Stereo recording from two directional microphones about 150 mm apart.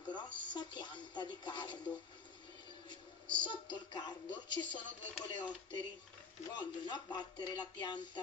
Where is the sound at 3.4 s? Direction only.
30° left (ahead or behind).